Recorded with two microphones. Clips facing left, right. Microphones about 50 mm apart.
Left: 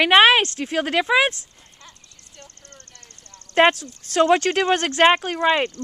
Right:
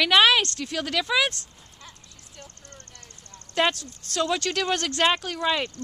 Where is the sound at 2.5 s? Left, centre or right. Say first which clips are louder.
Even; right.